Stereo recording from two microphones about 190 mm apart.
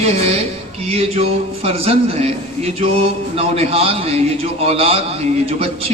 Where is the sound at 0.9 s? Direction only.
30° right (ahead or behind).